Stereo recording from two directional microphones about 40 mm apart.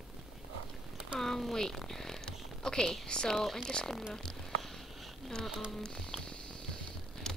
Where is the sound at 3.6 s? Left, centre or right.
Centre.